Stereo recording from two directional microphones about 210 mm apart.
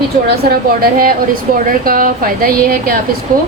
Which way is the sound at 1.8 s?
40° right (ahead or behind).